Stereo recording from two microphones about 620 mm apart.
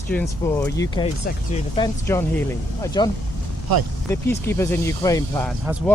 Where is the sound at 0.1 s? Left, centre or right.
Centre.